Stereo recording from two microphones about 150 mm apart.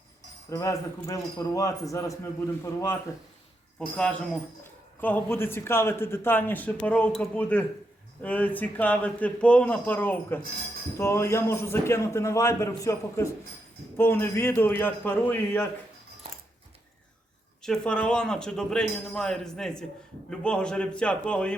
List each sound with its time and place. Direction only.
0.5 s a man's voice: 20° left (ahead or behind)
17.6 s a man's voice: 5° left (ahead or behind)